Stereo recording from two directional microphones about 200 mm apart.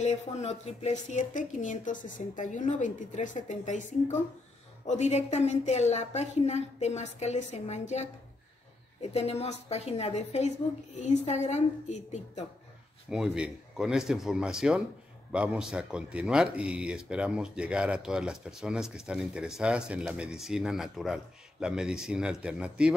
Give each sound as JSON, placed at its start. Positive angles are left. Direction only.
{"t": 0.0, "sound": "speech", "side_deg": 35}
{"t": 13.1, "sound": "speech", "side_deg": -5}